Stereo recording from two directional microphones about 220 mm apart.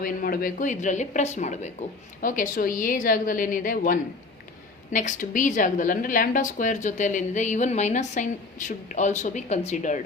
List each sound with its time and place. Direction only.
0.0 s a woman's voice: 40° left (ahead or behind)